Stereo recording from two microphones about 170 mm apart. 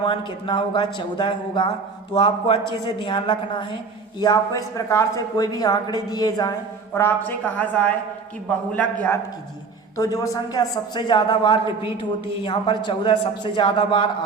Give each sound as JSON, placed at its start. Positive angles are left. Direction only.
{"t": 0.0, "sound": "a woman's voice", "side_deg": 30}
{"t": 6.9, "sound": "a woman's voice", "side_deg": 15}
{"t": 10.0, "sound": "a woman's voice", "side_deg": 20}